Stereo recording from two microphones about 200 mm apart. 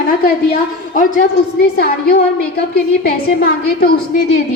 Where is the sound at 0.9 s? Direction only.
40° left (ahead or behind).